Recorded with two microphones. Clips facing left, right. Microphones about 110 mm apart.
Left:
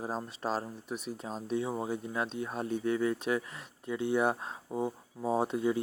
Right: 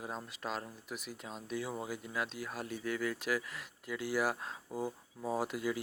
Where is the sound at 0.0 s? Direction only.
35° left (ahead or behind).